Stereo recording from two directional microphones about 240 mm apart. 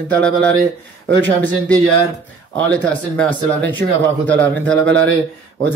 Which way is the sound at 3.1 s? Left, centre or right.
Centre.